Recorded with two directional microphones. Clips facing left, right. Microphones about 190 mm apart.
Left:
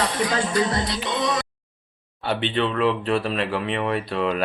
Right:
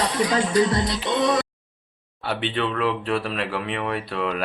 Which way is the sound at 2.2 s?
5° right (ahead or behind).